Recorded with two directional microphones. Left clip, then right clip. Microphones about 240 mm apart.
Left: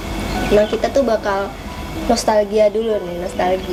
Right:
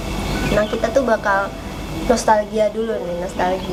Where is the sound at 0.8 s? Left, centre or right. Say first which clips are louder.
Left 1 dB; left.